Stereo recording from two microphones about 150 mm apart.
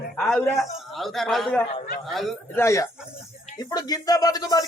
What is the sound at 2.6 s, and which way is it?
Speech, 20° left (ahead or behind).